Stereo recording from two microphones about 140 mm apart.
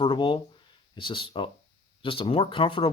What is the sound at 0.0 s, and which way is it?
Speech, 35° left (ahead or behind).